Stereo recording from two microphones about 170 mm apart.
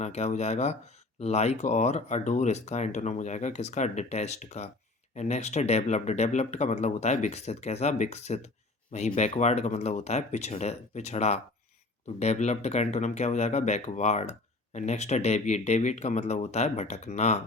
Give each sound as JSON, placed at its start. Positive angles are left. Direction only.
{"t": 0.0, "sound": "speech", "side_deg": 40}